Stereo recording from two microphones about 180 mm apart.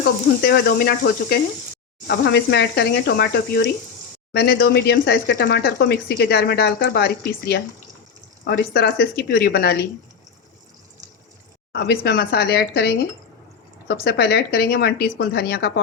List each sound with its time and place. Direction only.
0.4 s speech: 60° left (ahead or behind)
2.0 s speech: 70° left (ahead or behind)
11.7 s speech: 65° left (ahead or behind)